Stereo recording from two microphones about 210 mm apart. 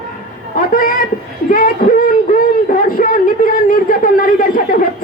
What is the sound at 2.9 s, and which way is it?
A man's voice, 40° left (ahead or behind).